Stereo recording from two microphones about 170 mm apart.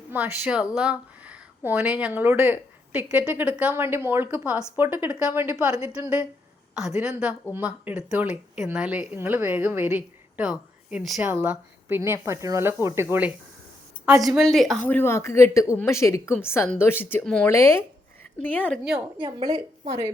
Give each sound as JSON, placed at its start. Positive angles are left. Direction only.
{"t": 0.1, "sound": "a woman's voice", "side_deg": -10}
{"t": 14.3, "sound": "a woman's voice", "side_deg": 0}
{"t": 14.8, "sound": "speech", "side_deg": 15}
{"t": 18.9, "sound": "speech", "side_deg": -5}
{"t": 19.5, "sound": "a woman's voice", "side_deg": -25}